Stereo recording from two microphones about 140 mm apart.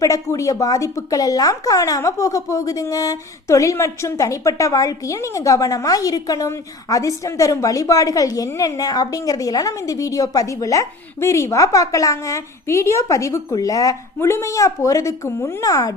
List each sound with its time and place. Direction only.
0.0 s speech: 25° left (ahead or behind)